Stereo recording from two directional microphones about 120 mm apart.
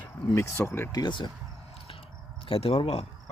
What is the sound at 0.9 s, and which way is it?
Speech, 35° left (ahead or behind).